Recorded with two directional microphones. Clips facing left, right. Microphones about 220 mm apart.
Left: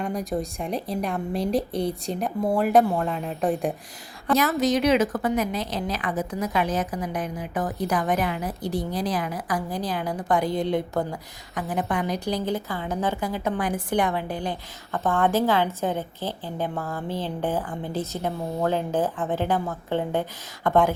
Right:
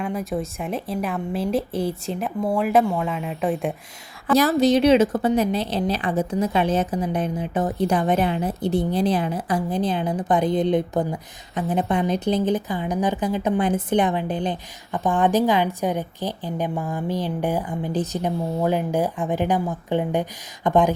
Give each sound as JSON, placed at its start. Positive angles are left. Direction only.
{"t": 0.0, "sound": "a woman's voice", "side_deg": 0}
{"t": 4.4, "sound": "a woman's voice", "side_deg": -30}